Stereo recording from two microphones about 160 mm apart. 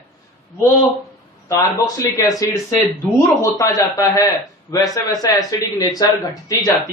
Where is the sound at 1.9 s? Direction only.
20° left (ahead or behind).